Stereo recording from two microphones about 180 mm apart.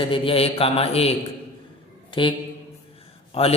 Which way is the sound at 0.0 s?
30° left (ahead or behind).